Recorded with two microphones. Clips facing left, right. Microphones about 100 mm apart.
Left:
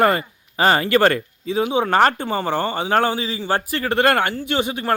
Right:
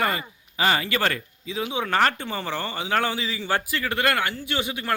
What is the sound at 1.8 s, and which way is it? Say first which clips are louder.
Speech: left 4 dB; 35° left (ahead or behind).